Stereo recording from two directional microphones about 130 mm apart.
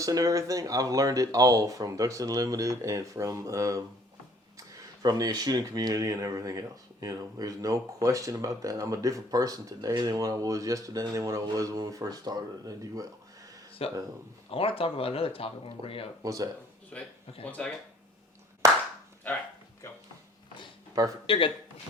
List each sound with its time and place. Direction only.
0.0 s speech: 25° right (ahead or behind)
13.8 s speech: 45° left (ahead or behind)
16.2 s speech: 30° right (ahead or behind)
16.9 s speech: 10° left (ahead or behind)
21.2 s speech: 45° left (ahead or behind)